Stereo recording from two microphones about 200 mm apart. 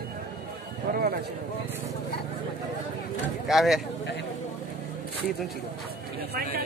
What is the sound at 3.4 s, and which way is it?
Speech, centre (ahead or behind).